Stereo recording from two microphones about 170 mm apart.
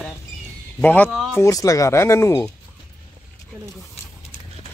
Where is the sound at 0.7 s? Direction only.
10° left (ahead or behind).